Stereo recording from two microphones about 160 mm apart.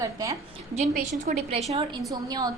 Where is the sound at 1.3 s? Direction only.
55° right (ahead or behind).